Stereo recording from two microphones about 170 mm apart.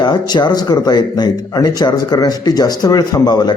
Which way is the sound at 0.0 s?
25° left (ahead or behind).